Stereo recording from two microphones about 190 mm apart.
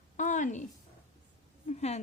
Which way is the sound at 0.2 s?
40° left (ahead or behind).